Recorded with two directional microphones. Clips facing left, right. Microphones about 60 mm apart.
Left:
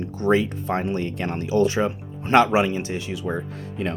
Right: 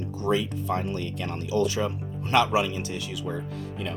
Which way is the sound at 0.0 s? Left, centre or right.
Left.